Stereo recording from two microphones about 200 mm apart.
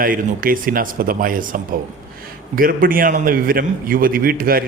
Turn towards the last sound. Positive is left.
turn(degrees=-45)  # may be behind; listen again after turning